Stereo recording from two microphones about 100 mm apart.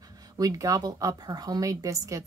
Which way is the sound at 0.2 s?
40° right (ahead or behind).